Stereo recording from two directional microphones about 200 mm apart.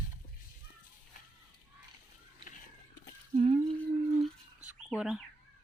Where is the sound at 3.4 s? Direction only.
30° right (ahead or behind).